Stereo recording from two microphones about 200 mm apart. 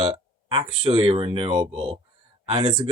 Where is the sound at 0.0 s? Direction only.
25° right (ahead or behind).